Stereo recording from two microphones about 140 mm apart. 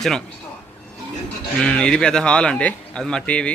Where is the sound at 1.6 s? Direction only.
5° left (ahead or behind).